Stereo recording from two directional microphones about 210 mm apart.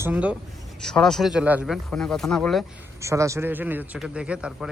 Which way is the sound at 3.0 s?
15° right (ahead or behind).